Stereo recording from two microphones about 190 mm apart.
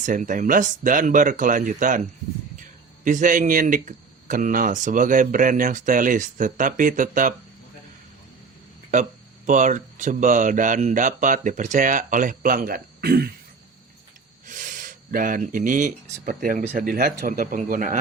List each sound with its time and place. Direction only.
0.0 s speech: 40° right (ahead or behind)
8.9 s speech: 40° right (ahead or behind)
14.4 s speech: 45° right (ahead or behind)